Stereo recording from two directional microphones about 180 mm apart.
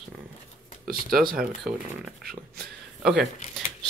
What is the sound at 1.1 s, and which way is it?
Speech, 55° right (ahead or behind).